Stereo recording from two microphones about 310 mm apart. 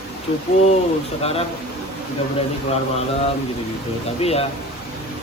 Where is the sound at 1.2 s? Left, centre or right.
Centre.